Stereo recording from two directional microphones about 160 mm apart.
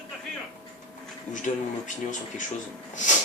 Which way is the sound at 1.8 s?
50° left (ahead or behind).